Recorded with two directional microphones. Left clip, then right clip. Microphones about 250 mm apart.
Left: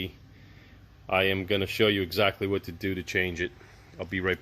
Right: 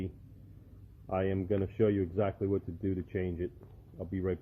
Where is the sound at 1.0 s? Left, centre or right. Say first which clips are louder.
Left 8 dB; centre.